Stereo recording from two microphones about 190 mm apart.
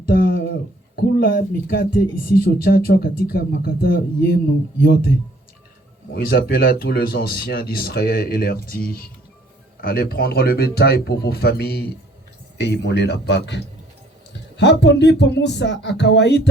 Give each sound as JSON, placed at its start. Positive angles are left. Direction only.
{"t": 0.1, "sound": "a sound", "side_deg": 50}
{"t": 0.9, "sound": "speech", "side_deg": 50}
{"t": 6.1, "sound": "speech", "side_deg": 50}